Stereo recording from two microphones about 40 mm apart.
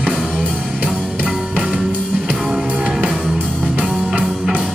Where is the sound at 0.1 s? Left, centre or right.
Centre.